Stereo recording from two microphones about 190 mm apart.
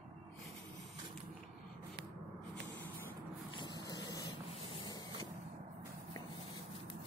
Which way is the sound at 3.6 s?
20° left (ahead or behind).